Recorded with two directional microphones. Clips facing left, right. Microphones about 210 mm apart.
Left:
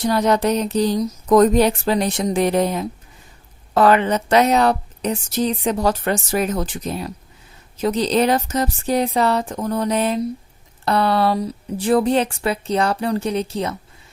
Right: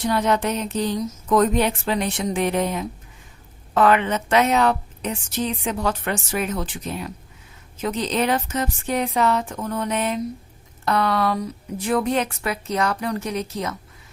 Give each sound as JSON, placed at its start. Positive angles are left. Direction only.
{"t": 0.0, "sound": "a woman's voice", "side_deg": 40}